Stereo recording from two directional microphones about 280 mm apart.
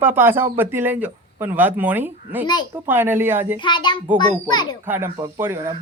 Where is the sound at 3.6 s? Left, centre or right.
Centre.